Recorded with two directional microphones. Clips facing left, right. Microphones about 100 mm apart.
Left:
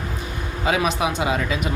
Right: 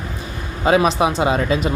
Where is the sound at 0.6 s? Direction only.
40° right (ahead or behind).